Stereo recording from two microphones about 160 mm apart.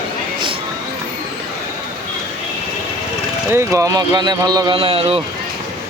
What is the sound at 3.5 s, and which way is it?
A man's voice, 20° right (ahead or behind).